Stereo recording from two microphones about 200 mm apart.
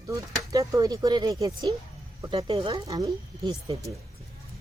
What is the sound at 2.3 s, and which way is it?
Speech, 25° right (ahead or behind).